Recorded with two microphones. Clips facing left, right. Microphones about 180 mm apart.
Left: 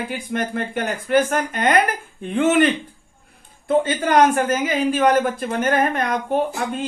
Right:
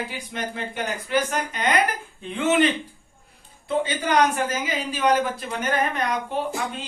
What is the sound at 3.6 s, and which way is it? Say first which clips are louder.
A woman's voice: left 5 dB; 50° left (ahead or behind).